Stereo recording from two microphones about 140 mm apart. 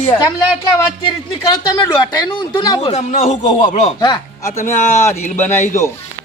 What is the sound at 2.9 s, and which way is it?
A man's voice, 55° left (ahead or behind).